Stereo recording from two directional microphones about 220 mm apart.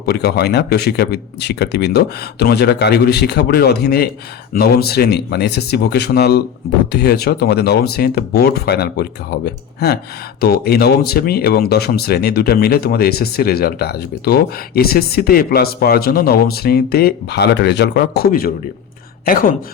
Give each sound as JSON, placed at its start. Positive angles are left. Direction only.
{"t": 0.0, "sound": "speech", "side_deg": 45}
{"t": 10.4, "sound": "a woman's voice", "side_deg": 45}